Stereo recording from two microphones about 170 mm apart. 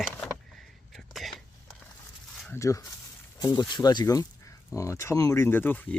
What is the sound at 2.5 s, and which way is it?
Speech, 20° left (ahead or behind).